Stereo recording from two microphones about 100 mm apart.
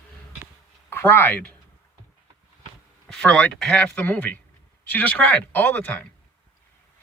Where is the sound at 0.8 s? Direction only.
20° left (ahead or behind).